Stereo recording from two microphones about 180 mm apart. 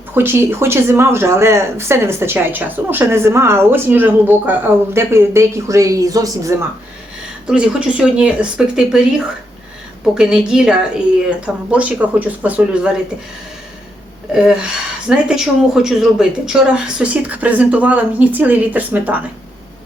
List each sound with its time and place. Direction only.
0.1 s speech: 10° right (ahead or behind)
7.4 s speech: 5° right (ahead or behind)
14.3 s speech: 5° right (ahead or behind)